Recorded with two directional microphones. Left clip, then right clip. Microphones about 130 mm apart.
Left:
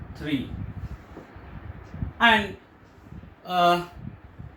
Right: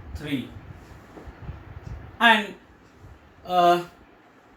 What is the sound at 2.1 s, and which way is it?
Speech, 25° left (ahead or behind).